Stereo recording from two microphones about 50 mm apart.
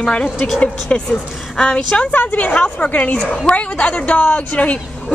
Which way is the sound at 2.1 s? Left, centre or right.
Left.